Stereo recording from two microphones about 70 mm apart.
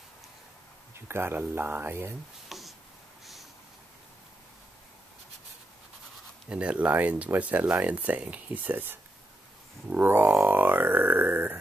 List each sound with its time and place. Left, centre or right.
0.9 s speech: right
2.5 s writing: centre
6.5 s speech: centre
10.4 s grunt: right